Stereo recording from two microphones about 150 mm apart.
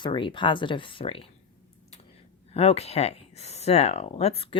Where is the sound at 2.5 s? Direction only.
40° left (ahead or behind).